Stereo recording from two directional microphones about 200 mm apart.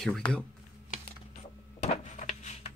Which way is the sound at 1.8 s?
35° left (ahead or behind).